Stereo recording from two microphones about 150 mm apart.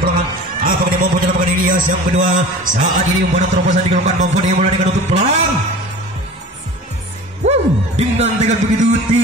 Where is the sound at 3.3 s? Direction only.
50° right (ahead or behind).